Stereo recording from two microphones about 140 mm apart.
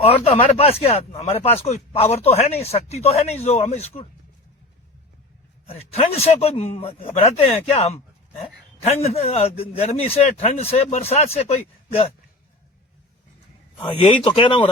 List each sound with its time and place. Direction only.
0.0 s speech: 45° left (ahead or behind)
5.6 s speech: 45° left (ahead or behind)
14.1 s speech: 40° left (ahead or behind)